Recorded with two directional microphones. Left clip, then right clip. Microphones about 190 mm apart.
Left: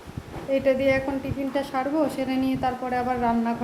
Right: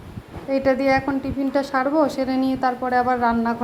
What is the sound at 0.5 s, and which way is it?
A woman's voice, 20° right (ahead or behind).